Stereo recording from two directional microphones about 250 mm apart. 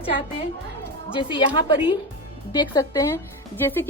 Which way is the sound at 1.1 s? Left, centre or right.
Centre.